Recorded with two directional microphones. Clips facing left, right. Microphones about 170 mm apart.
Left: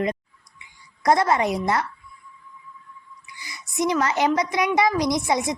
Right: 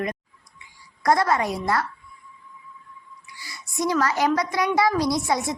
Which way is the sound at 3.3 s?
20° left (ahead or behind).